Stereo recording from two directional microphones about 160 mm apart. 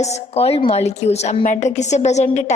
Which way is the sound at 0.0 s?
40° left (ahead or behind).